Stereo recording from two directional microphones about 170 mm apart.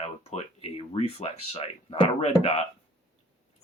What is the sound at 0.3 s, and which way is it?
Speech, 35° left (ahead or behind).